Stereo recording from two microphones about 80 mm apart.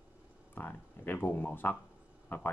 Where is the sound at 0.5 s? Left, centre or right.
Left.